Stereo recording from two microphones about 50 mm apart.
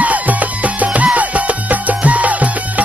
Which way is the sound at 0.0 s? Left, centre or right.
Right.